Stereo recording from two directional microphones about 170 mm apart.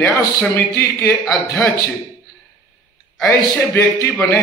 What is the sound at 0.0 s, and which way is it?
A man's voice, 15° left (ahead or behind).